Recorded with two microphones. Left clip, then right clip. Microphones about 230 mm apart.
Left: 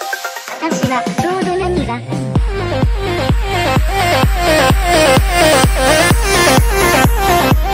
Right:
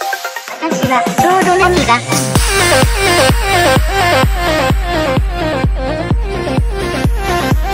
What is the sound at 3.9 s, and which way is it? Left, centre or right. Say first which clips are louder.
Music: right 2 dB; centre.